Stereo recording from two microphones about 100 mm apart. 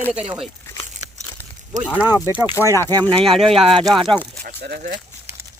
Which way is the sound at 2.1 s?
35° left (ahead or behind).